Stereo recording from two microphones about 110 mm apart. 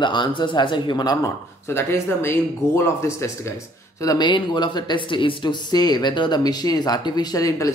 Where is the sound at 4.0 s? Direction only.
35° left (ahead or behind).